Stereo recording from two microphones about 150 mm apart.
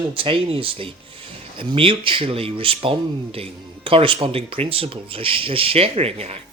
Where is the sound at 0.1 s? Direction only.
35° right (ahead or behind).